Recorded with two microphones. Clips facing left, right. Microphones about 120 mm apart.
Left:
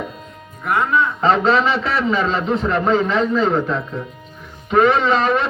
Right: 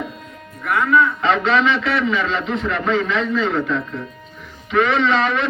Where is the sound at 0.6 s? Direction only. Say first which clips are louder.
Right 1 dB; 40° left (ahead or behind).